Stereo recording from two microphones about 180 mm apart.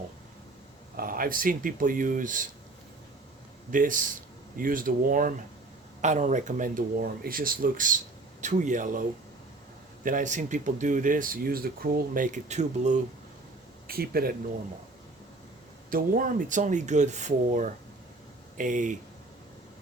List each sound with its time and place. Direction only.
0.9 s speech: 50° right (ahead or behind)
3.7 s speech: 50° right (ahead or behind)
13.8 s speech: 55° right (ahead or behind)
15.9 s speech: 50° right (ahead or behind)